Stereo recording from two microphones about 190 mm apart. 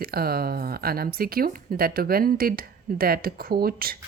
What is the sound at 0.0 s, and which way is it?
Speech, 50° right (ahead or behind).